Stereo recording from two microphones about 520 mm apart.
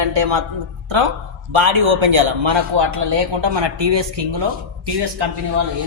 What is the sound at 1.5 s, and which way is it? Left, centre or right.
A man's voice, right.